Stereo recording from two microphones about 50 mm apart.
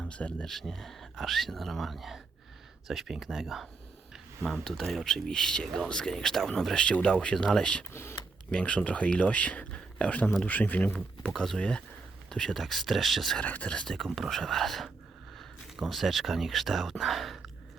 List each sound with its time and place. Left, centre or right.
0.0 s speech: left
0.4 s speech: centre
6.7 s speech: centre
7.9 s speech: left
8.4 s speech: left
11.3 s speech: centre
13.4 s speech: left
13.7 s speech: centre
15.9 s speech: centre